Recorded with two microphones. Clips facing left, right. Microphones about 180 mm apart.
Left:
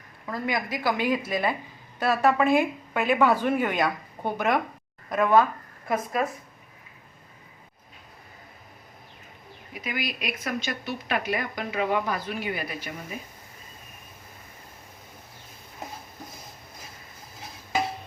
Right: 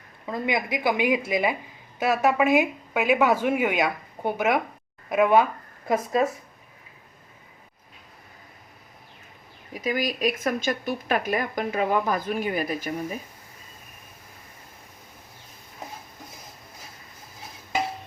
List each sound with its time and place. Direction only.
0.3 s a woman's voice: 20° right (ahead or behind)
5.9 s a woman's voice: 25° right (ahead or behind)
9.7 s speech: 40° right (ahead or behind)